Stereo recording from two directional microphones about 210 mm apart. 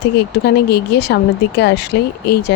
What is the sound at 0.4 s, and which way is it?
Speech, 50° left (ahead or behind).